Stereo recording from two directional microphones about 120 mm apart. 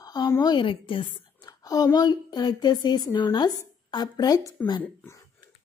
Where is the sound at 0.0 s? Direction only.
35° left (ahead or behind).